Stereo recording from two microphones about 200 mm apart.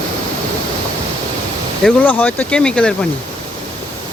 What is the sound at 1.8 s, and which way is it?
Speech, 10° left (ahead or behind).